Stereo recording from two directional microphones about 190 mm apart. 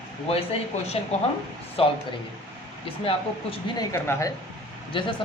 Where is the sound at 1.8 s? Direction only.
30° left (ahead or behind).